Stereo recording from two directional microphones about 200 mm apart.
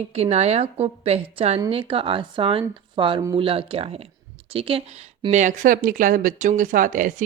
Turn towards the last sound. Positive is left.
turn(degrees=-40)  # may be behind; listen again after turning